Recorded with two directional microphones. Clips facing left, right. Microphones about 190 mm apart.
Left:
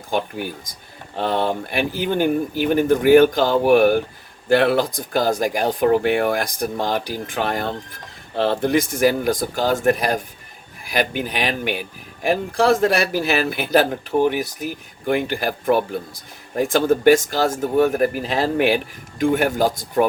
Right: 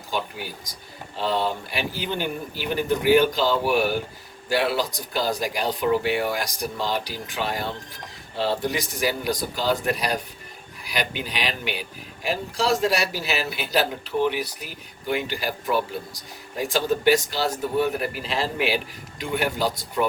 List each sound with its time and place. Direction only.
0.1 s speech: 50° left (ahead or behind)